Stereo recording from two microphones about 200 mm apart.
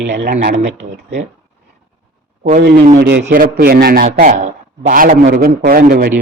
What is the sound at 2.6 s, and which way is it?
A man's voice, 55° right (ahead or behind).